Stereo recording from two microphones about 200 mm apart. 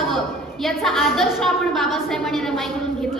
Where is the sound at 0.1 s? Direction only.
Centre (ahead or behind).